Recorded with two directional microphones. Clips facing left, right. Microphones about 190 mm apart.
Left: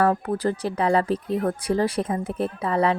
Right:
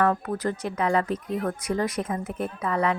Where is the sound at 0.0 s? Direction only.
30° left (ahead or behind).